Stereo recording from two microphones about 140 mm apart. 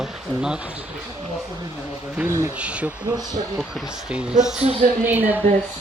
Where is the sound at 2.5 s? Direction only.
10° right (ahead or behind).